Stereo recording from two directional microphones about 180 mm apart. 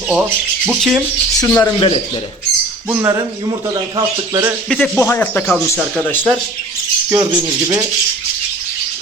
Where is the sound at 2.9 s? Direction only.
15° right (ahead or behind).